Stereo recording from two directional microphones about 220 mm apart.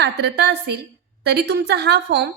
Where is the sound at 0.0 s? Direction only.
50° right (ahead or behind).